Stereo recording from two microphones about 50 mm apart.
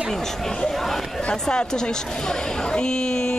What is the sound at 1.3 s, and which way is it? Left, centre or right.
Speech, centre.